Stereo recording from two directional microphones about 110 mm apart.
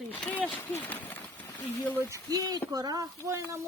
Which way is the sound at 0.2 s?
15° left (ahead or behind).